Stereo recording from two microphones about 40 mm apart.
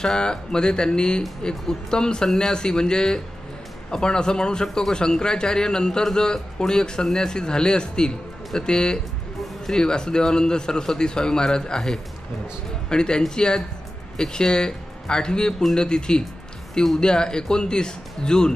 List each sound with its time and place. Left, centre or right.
0.0 s a man's voice: centre